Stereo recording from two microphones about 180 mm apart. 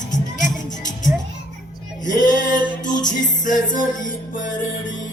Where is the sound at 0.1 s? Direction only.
45° left (ahead or behind).